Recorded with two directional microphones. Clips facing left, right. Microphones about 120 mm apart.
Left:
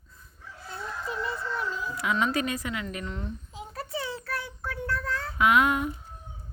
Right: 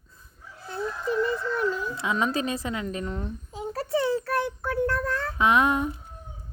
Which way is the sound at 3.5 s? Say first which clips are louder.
Right 8 dB; 45° right (ahead or behind).